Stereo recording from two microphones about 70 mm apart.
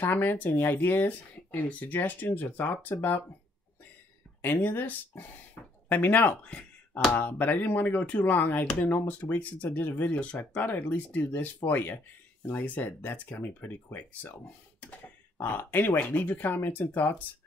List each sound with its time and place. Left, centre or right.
0.0 s speech: left
4.4 s speech: left